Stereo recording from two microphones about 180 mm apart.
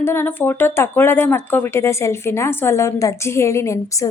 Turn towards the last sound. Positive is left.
turn(degrees=15)  # may be behind; listen again after turning